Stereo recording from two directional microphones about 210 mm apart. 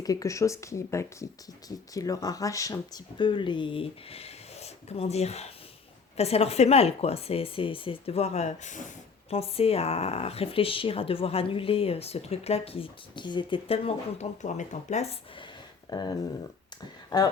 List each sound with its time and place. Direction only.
0.0 s speech: 15° left (ahead or behind); by 15.4 s 30° left (ahead or behind)
15.9 s speech: 20° left (ahead or behind)